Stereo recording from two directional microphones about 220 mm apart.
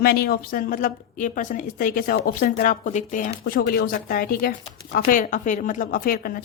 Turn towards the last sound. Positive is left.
turn(degrees=40)  # may be behind; listen again after turning